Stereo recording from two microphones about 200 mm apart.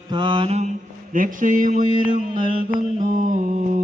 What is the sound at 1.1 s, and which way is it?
Speech, 40° right (ahead or behind).